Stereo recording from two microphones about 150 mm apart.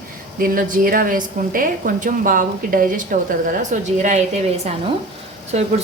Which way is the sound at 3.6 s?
55° right (ahead or behind).